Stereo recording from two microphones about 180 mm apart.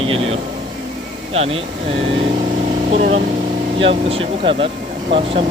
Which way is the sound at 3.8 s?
30° right (ahead or behind).